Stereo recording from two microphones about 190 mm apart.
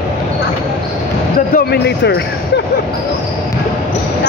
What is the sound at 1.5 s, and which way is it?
Speech, 60° left (ahead or behind).